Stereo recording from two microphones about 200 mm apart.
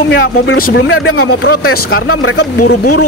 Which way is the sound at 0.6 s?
45° left (ahead or behind).